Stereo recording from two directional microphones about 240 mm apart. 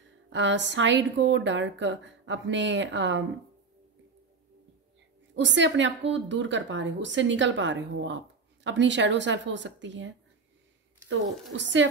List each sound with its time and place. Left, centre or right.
0.3 s a woman's voice: right
5.3 s a woman's voice: right
11.5 s a woman's voice: right